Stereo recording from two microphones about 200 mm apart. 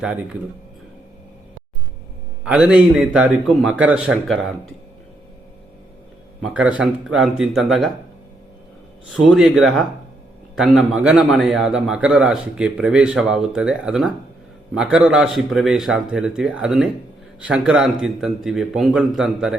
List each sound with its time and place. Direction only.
2.4 s a man's voice: 5° right (ahead or behind)
6.4 s a man's voice: 5° right (ahead or behind)
9.0 s a man's voice: centre (ahead or behind)